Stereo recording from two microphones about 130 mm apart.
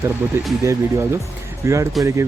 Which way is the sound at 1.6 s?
20° right (ahead or behind).